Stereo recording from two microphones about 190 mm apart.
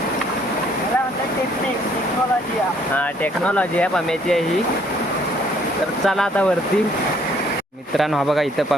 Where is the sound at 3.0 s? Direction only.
5° left (ahead or behind).